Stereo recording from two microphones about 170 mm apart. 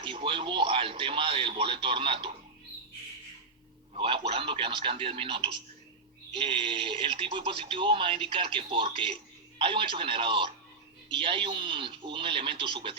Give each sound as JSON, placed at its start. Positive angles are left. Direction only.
{"t": 0.0, "sound": "speech", "side_deg": -30}
{"t": 3.9, "sound": "speech", "side_deg": -30}